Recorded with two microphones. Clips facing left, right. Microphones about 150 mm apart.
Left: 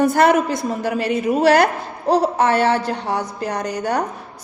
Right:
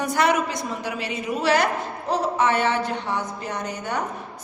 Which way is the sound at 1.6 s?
35° left (ahead or behind).